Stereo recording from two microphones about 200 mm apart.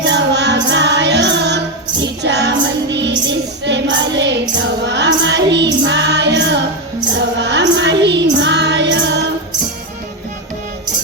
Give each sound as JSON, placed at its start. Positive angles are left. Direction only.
{"t": 0.1, "sound": "music", "side_deg": -60}
{"t": 3.2, "sound": "child singing", "side_deg": -60}
{"t": 7.2, "sound": "music", "side_deg": -60}